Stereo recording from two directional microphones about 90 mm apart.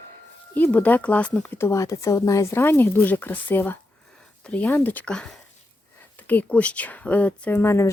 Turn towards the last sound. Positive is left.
turn(degrees=30)  # may be behind; listen again after turning